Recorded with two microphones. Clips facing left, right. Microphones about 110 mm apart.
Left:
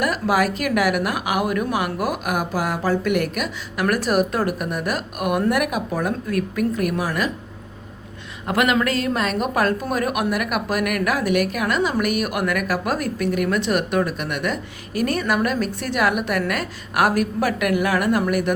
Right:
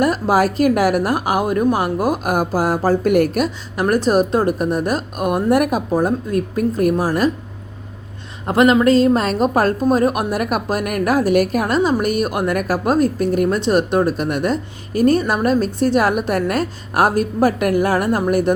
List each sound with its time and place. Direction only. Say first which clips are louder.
0.0 s a woman's voice: right 4 dB; 35° right (ahead or behind)
8.4 s a woman's voice: right 7 dB; 30° right (ahead or behind)